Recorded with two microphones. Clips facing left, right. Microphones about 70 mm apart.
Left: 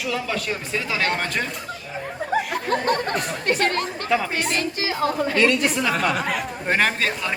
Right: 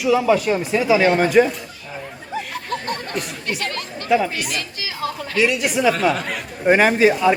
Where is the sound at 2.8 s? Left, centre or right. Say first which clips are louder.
Left 4 dB; left.